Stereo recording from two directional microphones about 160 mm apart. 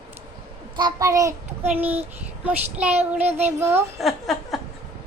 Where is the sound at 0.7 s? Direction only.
25° right (ahead or behind).